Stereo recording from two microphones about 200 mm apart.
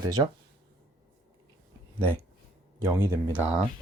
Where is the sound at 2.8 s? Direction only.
15° right (ahead or behind).